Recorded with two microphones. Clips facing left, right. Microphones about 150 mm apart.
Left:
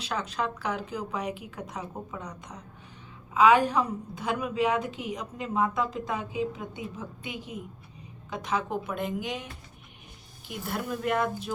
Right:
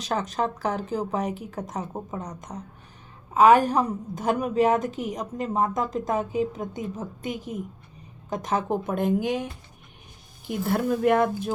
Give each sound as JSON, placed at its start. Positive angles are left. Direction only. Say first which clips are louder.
{"t": 0.0, "sound": "a woman's voice", "louder": "right 5 dB", "side_deg": -45}
{"t": 10.7, "sound": "a woman's voice", "louder": "right 8 dB", "side_deg": -50}